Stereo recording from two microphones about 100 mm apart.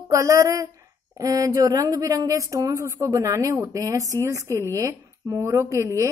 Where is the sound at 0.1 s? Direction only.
30° right (ahead or behind).